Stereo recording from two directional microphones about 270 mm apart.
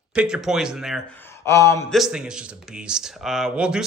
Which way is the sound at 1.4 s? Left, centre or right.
Centre.